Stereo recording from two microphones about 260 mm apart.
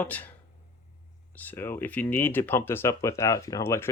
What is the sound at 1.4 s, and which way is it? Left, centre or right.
Speech, centre.